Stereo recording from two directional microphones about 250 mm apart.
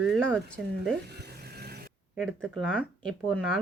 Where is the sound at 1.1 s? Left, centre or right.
Right.